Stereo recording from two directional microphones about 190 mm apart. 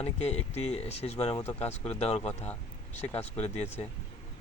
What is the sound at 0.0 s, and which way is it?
Speech, 35° left (ahead or behind).